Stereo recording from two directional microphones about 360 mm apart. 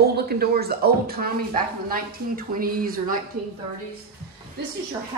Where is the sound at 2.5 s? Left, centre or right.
Right.